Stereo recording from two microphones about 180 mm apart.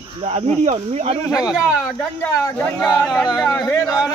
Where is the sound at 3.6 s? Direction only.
15° left (ahead or behind).